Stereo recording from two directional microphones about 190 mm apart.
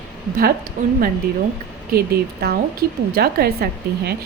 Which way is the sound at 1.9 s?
55° right (ahead or behind).